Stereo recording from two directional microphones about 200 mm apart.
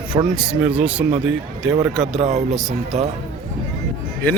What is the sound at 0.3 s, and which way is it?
Speech, 5° right (ahead or behind).